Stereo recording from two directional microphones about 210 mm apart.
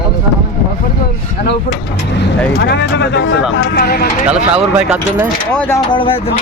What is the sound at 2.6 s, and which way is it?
Speech, 55° left (ahead or behind).